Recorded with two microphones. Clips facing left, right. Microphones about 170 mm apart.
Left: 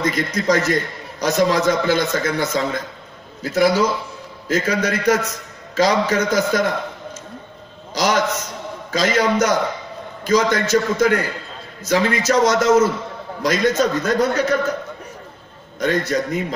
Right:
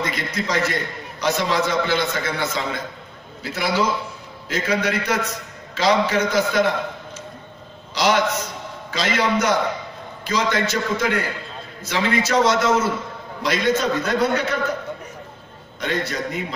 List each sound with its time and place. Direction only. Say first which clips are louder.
0.0 s a man's voice: left 5 dB; 45° left (ahead or behind)
7.9 s a man's voice: even; 45° left (ahead or behind)
15.8 s a man's voice: left 5 dB; 45° left (ahead or behind)